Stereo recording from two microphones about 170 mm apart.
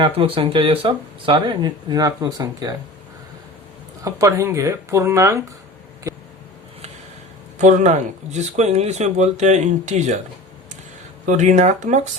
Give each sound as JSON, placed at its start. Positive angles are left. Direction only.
{"t": 0.0, "sound": "speech", "side_deg": -30}
{"t": 4.0, "sound": "speech", "side_deg": -20}
{"t": 6.1, "sound": "a sound", "side_deg": -20}
{"t": 7.6, "sound": "speech", "side_deg": -45}
{"t": 11.3, "sound": "speech", "side_deg": -45}